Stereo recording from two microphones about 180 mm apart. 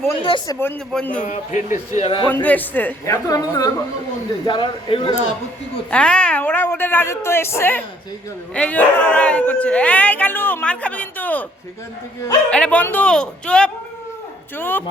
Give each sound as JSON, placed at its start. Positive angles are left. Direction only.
{"t": 0.2, "sound": "speech", "side_deg": 25}
{"t": 0.6, "sound": "speech", "side_deg": 10}
{"t": 1.2, "sound": "speech", "side_deg": 45}
{"t": 2.2, "sound": "speech", "side_deg": 10}
{"t": 3.2, "sound": "speech", "side_deg": 20}
{"t": 5.9, "sound": "speech", "side_deg": 5}
{"t": 12.5, "sound": "speech", "side_deg": 5}